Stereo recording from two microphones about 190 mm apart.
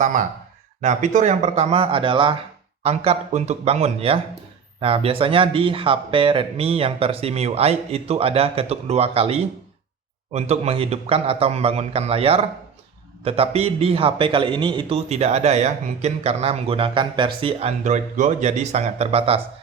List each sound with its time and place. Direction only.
0.0 s a man's voice: 40° right (ahead or behind)